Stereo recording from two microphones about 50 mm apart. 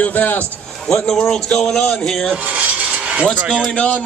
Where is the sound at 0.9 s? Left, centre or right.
Centre.